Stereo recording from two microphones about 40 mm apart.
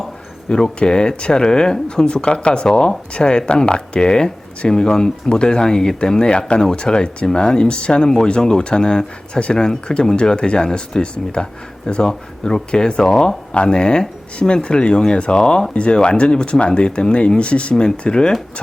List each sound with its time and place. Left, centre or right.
0.5 s speech: centre